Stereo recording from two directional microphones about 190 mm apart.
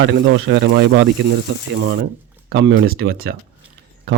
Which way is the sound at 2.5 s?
70° right (ahead or behind).